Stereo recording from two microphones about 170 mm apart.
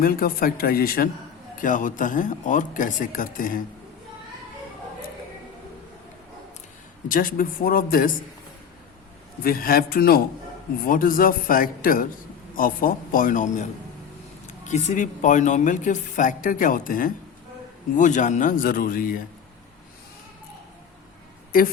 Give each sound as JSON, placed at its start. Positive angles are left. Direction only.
{"t": 0.0, "sound": "a man's voice", "side_deg": 60}
{"t": 7.1, "sound": "a man's voice", "side_deg": 55}
{"t": 9.4, "sound": "a man's voice", "side_deg": 60}
{"t": 21.5, "sound": "a man's voice", "side_deg": 55}